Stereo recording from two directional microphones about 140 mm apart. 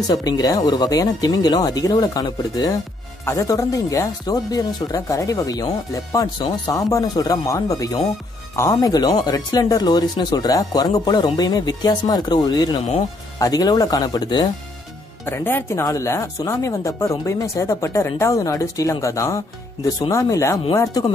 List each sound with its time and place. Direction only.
0.1 s speech: 30° left (ahead or behind)
15.2 s speech: 15° left (ahead or behind)